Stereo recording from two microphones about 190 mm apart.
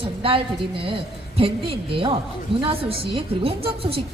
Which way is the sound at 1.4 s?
30° right (ahead or behind).